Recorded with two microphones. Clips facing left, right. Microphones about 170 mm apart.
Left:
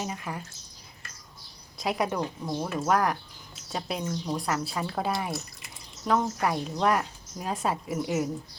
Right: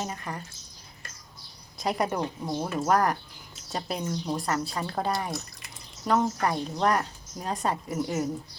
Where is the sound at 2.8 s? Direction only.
Centre (ahead or behind).